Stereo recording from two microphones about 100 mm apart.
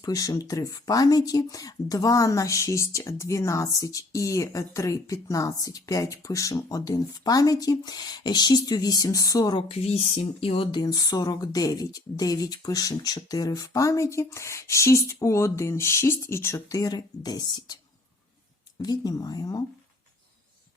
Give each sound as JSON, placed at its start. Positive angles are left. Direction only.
{"t": 0.0, "sound": "speech", "side_deg": 35}
{"t": 9.6, "sound": "speech", "side_deg": 75}
{"t": 10.4, "sound": "speech", "side_deg": 65}
{"t": 10.8, "sound": "speech", "side_deg": 40}
{"t": 18.8, "sound": "speech", "side_deg": 40}